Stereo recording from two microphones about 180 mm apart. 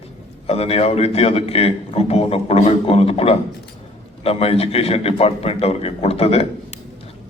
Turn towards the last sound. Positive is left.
turn(degrees=35)  # may be behind; listen again after turning